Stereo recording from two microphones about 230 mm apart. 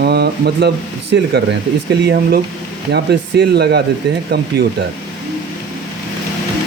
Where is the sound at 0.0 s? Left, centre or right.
Right.